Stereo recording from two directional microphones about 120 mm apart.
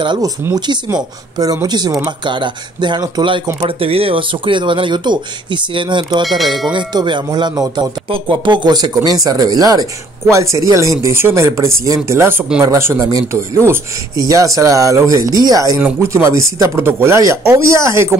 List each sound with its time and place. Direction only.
0.0 s speech: 40° right (ahead or behind)
3.6 s speech: 50° right (ahead or behind)
6.2 s speech: centre (ahead or behind)
6.7 s speech: 40° right (ahead or behind)